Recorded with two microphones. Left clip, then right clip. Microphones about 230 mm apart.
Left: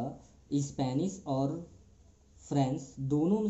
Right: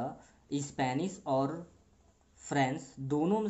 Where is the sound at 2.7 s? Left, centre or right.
Right.